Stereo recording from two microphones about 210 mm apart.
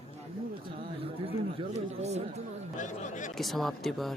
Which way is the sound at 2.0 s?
30° right (ahead or behind).